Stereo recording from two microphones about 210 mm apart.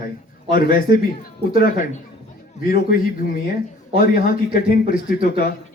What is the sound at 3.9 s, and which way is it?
Speech, 45° left (ahead or behind).